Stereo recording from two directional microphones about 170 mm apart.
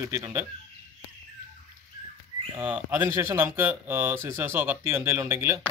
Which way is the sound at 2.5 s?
10° right (ahead or behind).